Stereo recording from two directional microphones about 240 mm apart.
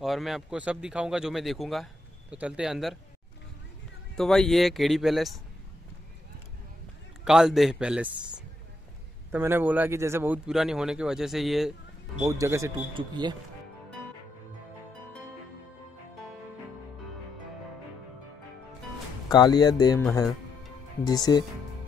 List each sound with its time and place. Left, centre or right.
0.0 s speech: centre
4.1 s speech: centre
7.2 s speech: centre
9.3 s speech: centre
19.2 s speech: centre
21.0 s speech: centre